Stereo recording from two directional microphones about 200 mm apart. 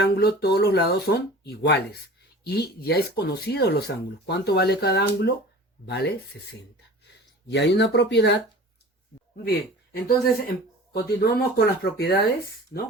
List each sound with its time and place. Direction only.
0.0 s speech: 55° left (ahead or behind)
7.4 s speech: 55° left (ahead or behind)
9.4 s speech: 50° left (ahead or behind)